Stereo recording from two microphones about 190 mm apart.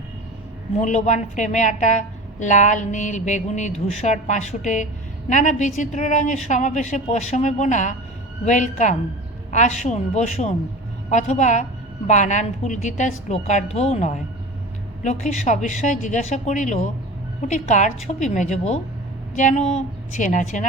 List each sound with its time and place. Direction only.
0.8 s a woman's voice: 40° left (ahead or behind)